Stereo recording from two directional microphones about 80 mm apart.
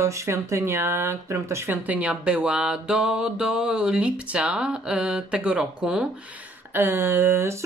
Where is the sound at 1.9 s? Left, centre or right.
Centre.